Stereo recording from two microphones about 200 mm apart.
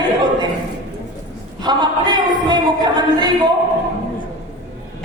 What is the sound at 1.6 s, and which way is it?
Speech, 20° right (ahead or behind).